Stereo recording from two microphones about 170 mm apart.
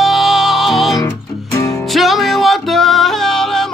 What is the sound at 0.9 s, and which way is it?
Music, 20° left (ahead or behind).